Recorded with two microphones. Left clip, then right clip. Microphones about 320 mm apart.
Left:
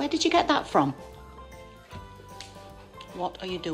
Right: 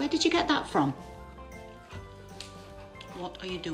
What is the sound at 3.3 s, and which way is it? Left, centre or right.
Speech, centre.